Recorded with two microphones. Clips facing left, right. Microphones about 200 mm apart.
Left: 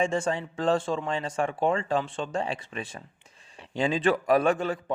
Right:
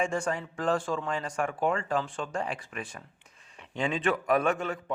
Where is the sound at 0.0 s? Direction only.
25° left (ahead or behind).